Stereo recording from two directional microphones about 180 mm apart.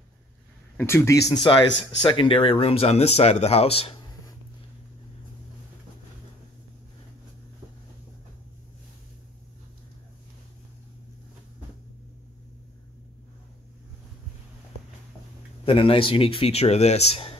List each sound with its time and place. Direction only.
0.7 s speech: 15° left (ahead or behind)
1.3 s speech: 25° left (ahead or behind)
15.6 s speech: 30° left (ahead or behind)